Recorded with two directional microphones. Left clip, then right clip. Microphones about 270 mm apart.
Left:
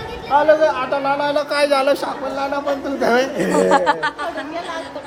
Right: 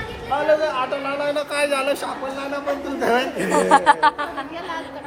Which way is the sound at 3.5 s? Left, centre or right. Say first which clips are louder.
Right 1 dB; centre.